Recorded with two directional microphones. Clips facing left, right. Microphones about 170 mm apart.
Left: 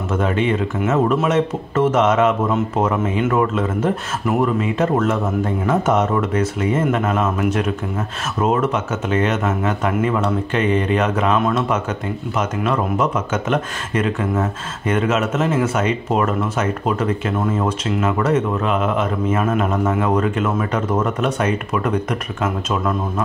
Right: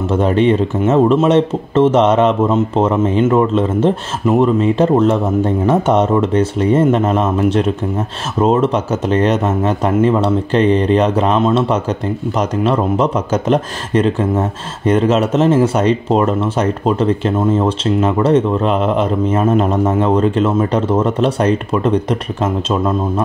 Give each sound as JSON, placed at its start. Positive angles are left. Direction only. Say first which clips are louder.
{"t": 0.1, "sound": "speech", "louder": "right 6 dB", "side_deg": -35}